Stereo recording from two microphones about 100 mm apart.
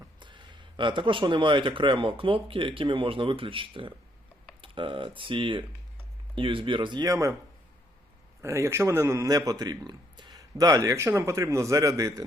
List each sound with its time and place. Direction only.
0.2 s speech: 50° right (ahead or behind)
7.1 s a man's voice: 30° right (ahead or behind)
8.4 s a man's voice: 30° right (ahead or behind)